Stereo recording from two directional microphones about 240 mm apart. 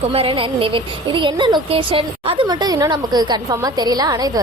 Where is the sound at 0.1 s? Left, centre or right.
Right.